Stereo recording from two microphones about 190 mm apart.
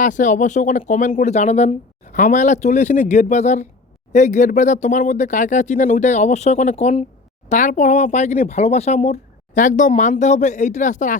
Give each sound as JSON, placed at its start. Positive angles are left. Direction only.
{"t": 0.0, "sound": "speech", "side_deg": 40}